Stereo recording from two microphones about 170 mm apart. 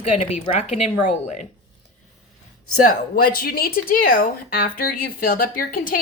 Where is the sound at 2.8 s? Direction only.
55° left (ahead or behind).